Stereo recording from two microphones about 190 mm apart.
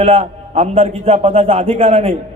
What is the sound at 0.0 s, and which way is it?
A man's voice, 30° right (ahead or behind).